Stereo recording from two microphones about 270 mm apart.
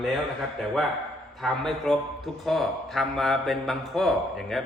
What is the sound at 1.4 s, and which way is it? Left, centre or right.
A man's voice, centre.